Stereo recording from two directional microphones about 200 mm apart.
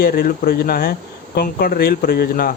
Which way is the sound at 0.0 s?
50° left (ahead or behind).